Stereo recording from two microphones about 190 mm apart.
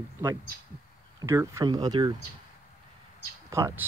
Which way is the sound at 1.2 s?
15° right (ahead or behind).